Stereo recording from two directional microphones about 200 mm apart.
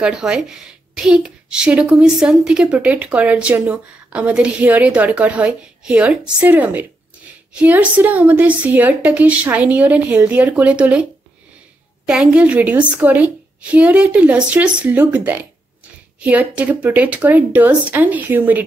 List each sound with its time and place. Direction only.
0.0 s a woman's voice: 5° right (ahead or behind)
12.1 s a woman's voice: 5° right (ahead or behind)